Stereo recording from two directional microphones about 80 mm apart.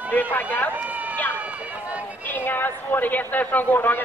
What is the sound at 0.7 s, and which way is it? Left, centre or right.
Run, centre.